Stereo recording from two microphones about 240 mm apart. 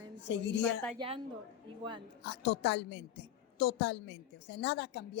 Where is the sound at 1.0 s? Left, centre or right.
Centre.